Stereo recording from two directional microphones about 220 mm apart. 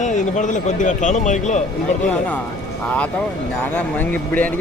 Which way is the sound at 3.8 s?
5° left (ahead or behind).